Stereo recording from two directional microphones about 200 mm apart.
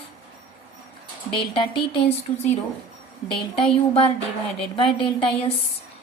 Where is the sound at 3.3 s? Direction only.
25° left (ahead or behind).